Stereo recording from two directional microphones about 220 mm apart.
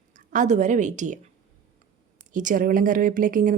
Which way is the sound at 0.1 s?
35° right (ahead or behind).